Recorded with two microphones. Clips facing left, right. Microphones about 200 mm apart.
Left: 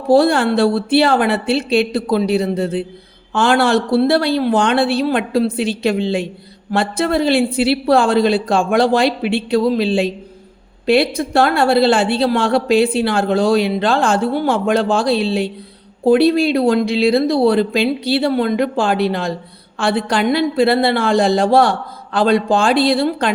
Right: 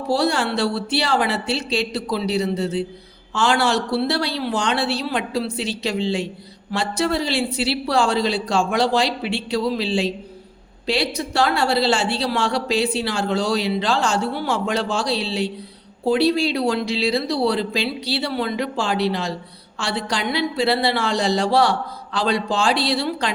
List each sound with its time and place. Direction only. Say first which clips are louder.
0.1 s a woman's voice: left 8 dB; 55° left (ahead or behind)